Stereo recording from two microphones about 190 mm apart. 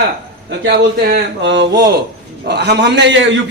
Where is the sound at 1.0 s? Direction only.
60° right (ahead or behind).